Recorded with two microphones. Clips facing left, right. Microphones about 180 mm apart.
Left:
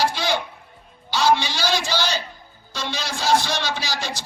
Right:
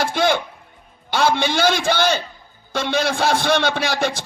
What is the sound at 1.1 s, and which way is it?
A man's voice, 55° right (ahead or behind).